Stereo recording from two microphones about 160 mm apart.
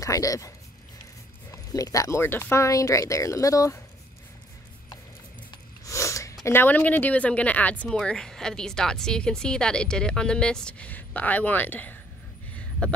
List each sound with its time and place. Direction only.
0.0 s speech: 20° left (ahead or behind)
1.5 s speech: 20° left (ahead or behind)
5.5 s snort: 20° left (ahead or behind)
6.4 s speech: 15° left (ahead or behind)